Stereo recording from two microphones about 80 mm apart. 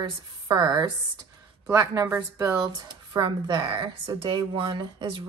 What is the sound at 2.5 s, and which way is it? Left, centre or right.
Speech, right.